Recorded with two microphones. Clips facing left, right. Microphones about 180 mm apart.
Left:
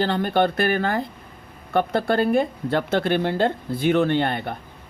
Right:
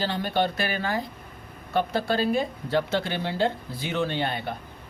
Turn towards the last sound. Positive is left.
turn(degrees=55)  # may be behind; listen again after turning